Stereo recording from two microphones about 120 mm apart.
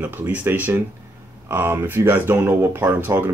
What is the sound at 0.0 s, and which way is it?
Speech, 15° right (ahead or behind).